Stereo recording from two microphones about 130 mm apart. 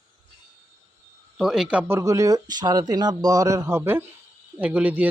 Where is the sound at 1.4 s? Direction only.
5° right (ahead or behind).